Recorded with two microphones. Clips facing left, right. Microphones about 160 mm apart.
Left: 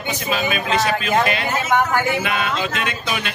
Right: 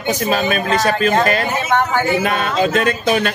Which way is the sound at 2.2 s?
40° right (ahead or behind).